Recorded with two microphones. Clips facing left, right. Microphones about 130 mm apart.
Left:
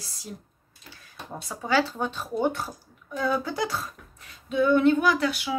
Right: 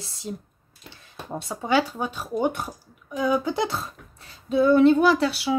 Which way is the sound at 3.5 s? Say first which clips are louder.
Right 3 dB; 25° right (ahead or behind).